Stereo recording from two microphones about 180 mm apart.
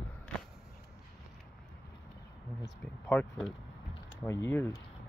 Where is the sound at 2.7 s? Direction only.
5° left (ahead or behind).